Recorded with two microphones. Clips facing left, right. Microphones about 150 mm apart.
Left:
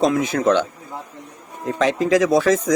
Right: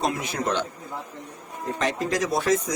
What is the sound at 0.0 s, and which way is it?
Speech, 90° left.